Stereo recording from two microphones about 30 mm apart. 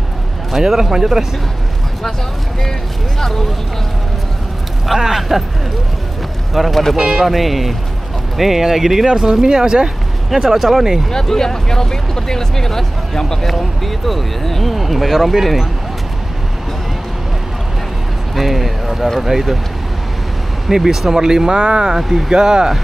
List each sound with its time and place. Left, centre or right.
0.5 s speech: centre
3.2 s speech: centre
4.9 s speech: centre
6.5 s speech: centre; by 9.8 s right
10.3 s speech: centre
11.1 s speech: centre
18.3 s a sound: centre
19.1 s speech: centre
20.6 s speech: centre
21.5 s speech: right